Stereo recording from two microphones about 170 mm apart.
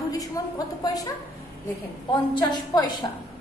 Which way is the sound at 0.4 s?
20° left (ahead or behind).